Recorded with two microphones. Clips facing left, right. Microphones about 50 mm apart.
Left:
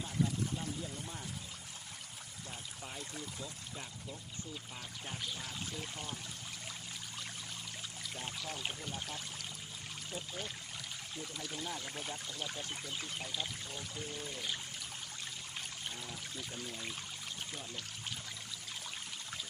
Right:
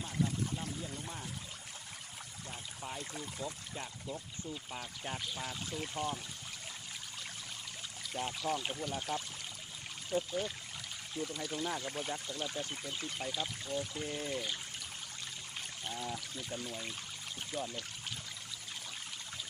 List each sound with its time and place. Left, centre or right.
3.1 s speech: centre
5.0 s pour: centre
8.1 s pour: centre
8.9 s speech: centre
14.0 s speech: right
14.3 s speech: centre
15.9 s speech: centre